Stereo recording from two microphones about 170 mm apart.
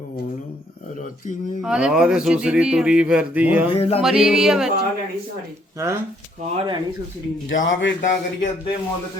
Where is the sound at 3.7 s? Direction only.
35° left (ahead or behind).